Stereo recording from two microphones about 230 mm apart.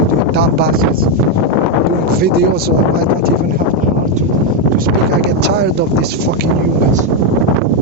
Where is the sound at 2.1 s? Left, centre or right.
Right.